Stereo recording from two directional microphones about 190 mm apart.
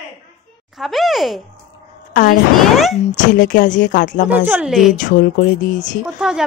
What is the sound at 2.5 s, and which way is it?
Speech, centre (ahead or behind).